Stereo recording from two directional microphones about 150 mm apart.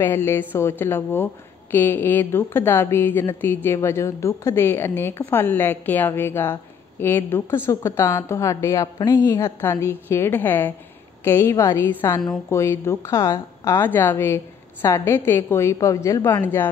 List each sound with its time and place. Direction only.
0.0 s a woman's voice: 15° left (ahead or behind)